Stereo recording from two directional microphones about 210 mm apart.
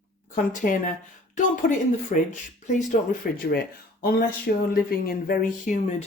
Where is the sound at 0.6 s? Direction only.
40° left (ahead or behind).